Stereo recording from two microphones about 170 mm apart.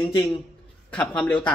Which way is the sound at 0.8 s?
5° left (ahead or behind).